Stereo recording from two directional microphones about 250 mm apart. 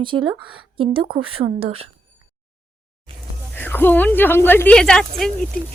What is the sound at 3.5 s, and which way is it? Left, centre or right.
Speech, centre.